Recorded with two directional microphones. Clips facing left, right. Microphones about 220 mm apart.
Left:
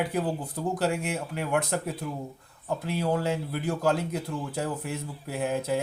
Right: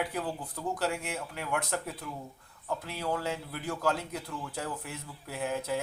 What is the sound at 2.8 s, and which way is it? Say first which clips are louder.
Speech: left 7 dB; 20° left (ahead or behind).